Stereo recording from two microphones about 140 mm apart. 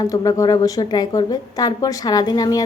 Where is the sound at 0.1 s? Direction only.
25° left (ahead or behind).